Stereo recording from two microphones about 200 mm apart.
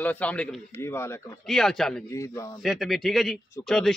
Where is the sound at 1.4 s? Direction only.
Centre (ahead or behind).